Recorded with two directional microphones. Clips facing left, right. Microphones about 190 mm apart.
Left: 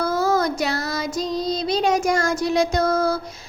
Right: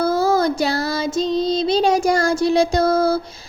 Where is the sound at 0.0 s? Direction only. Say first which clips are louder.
Right 3 dB; 30° right (ahead or behind).